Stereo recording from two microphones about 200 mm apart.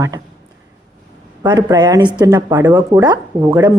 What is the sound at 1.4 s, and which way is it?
Speech, 20° right (ahead or behind).